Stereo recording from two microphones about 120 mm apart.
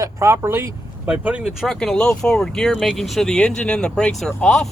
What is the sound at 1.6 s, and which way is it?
Speech, 5° left (ahead or behind).